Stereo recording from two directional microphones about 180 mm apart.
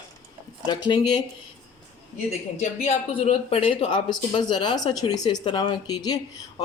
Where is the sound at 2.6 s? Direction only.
35° left (ahead or behind).